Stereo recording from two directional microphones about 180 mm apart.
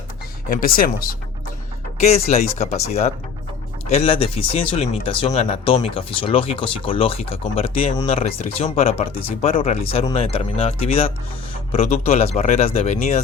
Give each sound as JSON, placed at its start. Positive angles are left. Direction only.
{"t": 0.5, "sound": "speech", "side_deg": 55}
{"t": 2.0, "sound": "speech", "side_deg": 35}